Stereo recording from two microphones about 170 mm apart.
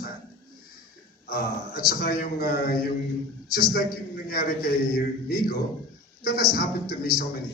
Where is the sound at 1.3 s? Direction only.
60° left (ahead or behind).